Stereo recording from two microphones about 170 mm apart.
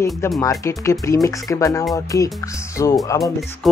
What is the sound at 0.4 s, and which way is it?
Speech, 20° left (ahead or behind).